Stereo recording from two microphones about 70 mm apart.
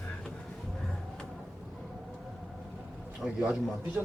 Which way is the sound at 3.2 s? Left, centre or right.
Centre.